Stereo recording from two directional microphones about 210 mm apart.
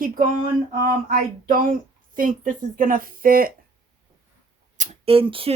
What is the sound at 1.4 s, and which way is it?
Speech, 40° right (ahead or behind).